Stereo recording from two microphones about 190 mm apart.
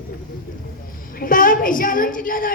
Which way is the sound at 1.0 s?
45° left (ahead or behind).